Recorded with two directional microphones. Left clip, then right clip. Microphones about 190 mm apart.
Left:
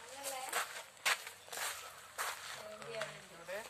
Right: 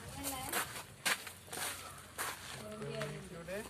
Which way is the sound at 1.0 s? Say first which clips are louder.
Left 1 dB; 10° left (ahead or behind).